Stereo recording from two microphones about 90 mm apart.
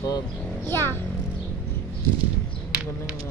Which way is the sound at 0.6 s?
25° left (ahead or behind).